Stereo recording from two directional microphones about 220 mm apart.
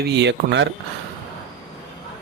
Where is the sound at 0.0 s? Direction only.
50° right (ahead or behind).